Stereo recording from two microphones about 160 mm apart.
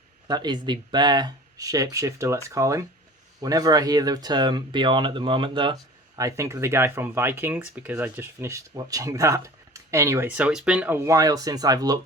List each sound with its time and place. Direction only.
0.3 s speech: 25° right (ahead or behind)
6.1 s speech: 20° right (ahead or behind)